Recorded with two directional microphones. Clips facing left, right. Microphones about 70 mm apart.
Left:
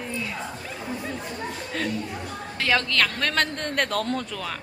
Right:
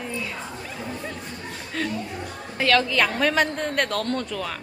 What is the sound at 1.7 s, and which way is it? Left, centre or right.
Speech, centre.